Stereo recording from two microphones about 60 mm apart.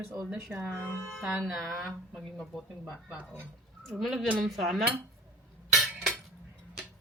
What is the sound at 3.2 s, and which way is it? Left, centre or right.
Speech, left.